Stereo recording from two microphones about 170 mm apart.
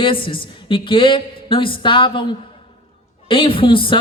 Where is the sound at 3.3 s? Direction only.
30° left (ahead or behind).